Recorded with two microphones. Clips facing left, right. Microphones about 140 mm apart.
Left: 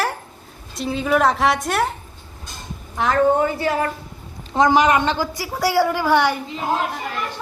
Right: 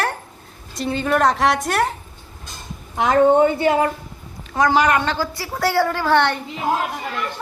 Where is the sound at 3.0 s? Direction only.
20° right (ahead or behind).